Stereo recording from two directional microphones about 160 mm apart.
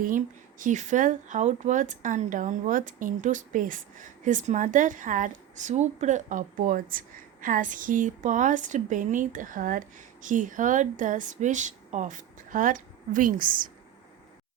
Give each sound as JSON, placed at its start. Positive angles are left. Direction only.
{"t": 0.6, "sound": "a woman's voice", "side_deg": -50}